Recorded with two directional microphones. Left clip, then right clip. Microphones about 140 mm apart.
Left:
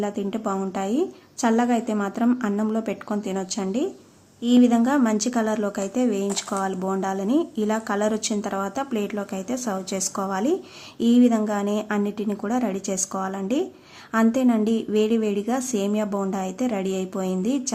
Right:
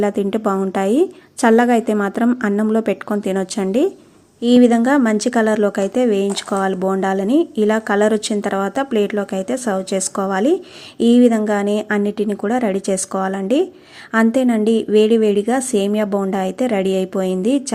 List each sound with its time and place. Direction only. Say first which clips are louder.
0.0 s a woman's voice: right 9 dB; 45° right (ahead or behind)
4.4 s speech: right 7 dB; 30° right (ahead or behind)